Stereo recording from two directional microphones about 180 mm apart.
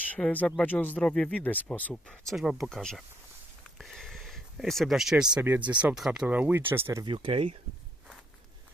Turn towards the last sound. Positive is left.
turn(degrees=-30)  # may be behind; listen again after turning